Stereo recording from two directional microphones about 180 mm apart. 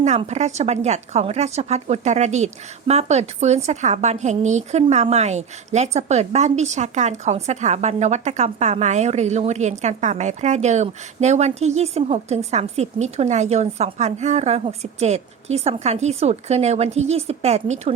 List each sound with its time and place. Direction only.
0.0 s speech: 40° right (ahead or behind)